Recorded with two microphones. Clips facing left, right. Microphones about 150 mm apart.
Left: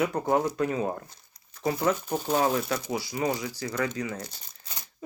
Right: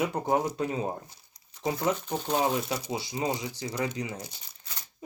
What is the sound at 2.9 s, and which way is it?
Speech, 25° right (ahead or behind).